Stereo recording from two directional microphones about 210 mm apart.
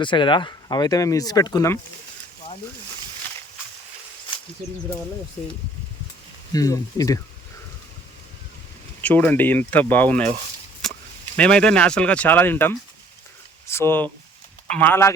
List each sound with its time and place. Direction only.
0.0 s speech: 25° left (ahead or behind)
6.5 s speech: 15° left (ahead or behind)
9.0 s speech: 10° left (ahead or behind)
11.3 s speech: 5° left (ahead or behind)